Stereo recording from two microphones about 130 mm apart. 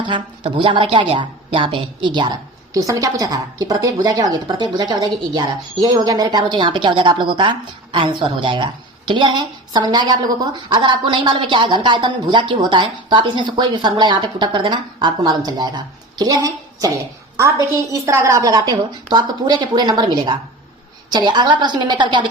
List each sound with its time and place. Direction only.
0.1 s speech: 40° right (ahead or behind)
2.7 s speech: 25° right (ahead or behind)